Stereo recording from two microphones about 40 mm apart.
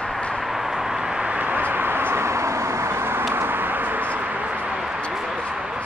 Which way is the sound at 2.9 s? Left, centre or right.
Right.